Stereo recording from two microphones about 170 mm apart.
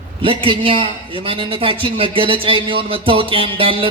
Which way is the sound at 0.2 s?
30° right (ahead or behind).